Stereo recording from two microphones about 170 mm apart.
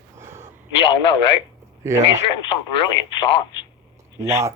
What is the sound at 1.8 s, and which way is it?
Speech, 15° right (ahead or behind).